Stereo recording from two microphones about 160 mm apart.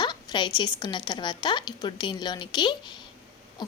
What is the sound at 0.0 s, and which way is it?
A woman's voice, 25° left (ahead or behind).